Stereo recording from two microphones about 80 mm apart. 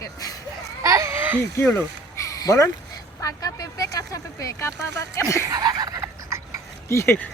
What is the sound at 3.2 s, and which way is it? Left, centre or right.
Speech, left.